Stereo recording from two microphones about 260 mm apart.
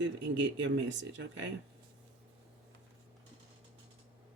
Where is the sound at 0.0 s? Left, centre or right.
Right.